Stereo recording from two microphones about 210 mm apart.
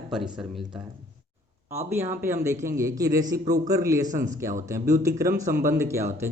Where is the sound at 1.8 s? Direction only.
10° right (ahead or behind).